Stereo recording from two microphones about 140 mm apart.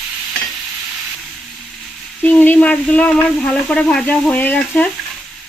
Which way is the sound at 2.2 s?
10° left (ahead or behind).